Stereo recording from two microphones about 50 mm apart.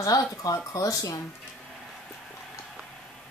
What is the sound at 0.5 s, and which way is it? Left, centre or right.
Speech, left.